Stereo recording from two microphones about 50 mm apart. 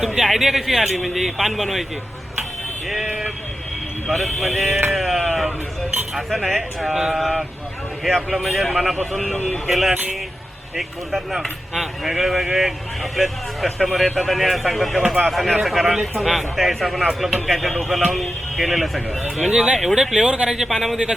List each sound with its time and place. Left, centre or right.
0.0 s a man's voice: centre
4.1 s a man's voice: centre
4.9 s sheep: centre
6.3 s a man's voice: centre
6.9 s a man's voice: centre
9.3 s speech: left
9.6 s a man's voice: centre
19.4 s speech: centre
19.7 s a man's voice: centre
20.1 s speech: centre
20.6 s a man's voice: centre